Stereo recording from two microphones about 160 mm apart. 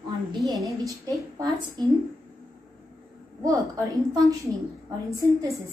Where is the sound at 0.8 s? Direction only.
20° right (ahead or behind).